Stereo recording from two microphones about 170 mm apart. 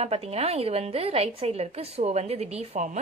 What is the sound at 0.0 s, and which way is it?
A woman's voice, 35° right (ahead or behind).